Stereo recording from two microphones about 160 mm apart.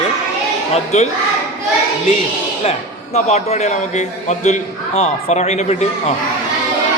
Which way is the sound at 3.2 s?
40° left (ahead or behind).